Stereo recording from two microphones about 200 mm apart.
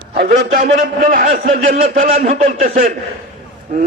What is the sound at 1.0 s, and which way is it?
A man's voice, 45° right (ahead or behind).